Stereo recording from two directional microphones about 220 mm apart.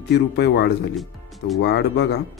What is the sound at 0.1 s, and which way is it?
Speech, 50° left (ahead or behind).